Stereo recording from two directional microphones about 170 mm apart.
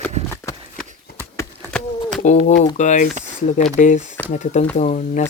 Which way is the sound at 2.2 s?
45° left (ahead or behind).